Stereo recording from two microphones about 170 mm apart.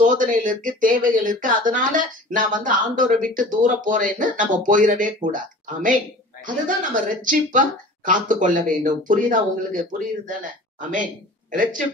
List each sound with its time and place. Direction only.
0.0 s speech: 50° right (ahead or behind)